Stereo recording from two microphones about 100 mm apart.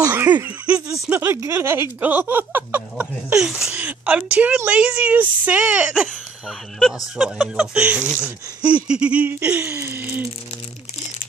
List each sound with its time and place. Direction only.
0.1 s laughter: 20° right (ahead or behind)
1.2 s speech: 30° right (ahead or behind)
3.3 s laughter: 5° right (ahead or behind)
7.2 s laughter: 10° right (ahead or behind)